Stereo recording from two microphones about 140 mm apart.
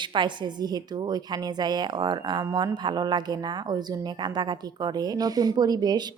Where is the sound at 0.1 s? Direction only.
35° right (ahead or behind).